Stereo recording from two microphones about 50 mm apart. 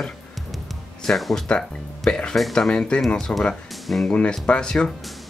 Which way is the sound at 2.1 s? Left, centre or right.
Centre.